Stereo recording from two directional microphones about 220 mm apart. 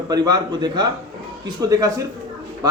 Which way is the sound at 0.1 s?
15° right (ahead or behind).